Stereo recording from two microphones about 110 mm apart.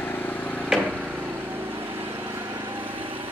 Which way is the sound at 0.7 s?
10° right (ahead or behind).